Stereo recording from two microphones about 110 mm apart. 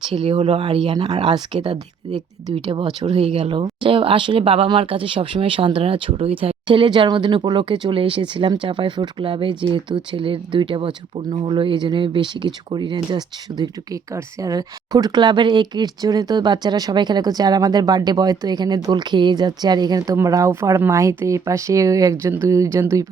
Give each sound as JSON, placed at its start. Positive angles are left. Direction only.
{"t": 0.1, "sound": "speech", "side_deg": -60}
{"t": 1.0, "sound": "speech", "side_deg": -70}
{"t": 3.1, "sound": "speech", "side_deg": -65}